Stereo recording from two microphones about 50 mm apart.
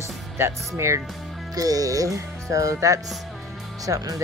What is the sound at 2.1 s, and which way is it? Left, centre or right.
Speech, right.